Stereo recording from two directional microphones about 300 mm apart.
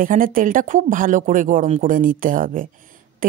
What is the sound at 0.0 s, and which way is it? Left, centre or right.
Speech, right.